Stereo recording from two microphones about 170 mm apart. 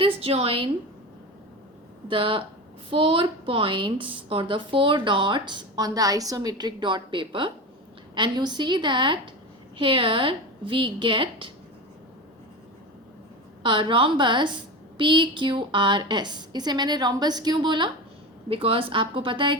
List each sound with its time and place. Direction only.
0.0 s a woman's voice: 35° right (ahead or behind)
2.0 s a woman's voice: 30° right (ahead or behind)
13.6 s a woman's voice: 30° right (ahead or behind)